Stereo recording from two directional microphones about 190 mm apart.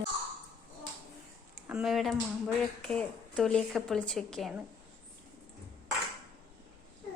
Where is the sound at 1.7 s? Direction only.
Centre (ahead or behind).